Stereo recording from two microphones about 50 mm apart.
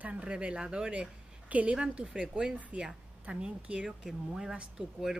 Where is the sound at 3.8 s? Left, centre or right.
Centre.